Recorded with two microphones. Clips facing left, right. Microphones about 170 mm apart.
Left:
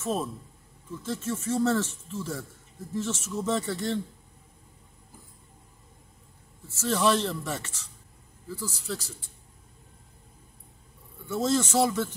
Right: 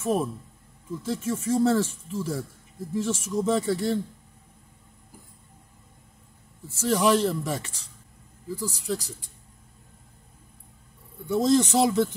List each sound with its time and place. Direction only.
0.0 s speech: 15° right (ahead or behind)
6.7 s speech: 15° right (ahead or behind)
11.2 s speech: 15° right (ahead or behind)